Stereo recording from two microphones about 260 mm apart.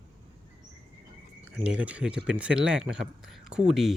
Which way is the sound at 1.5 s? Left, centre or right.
Centre.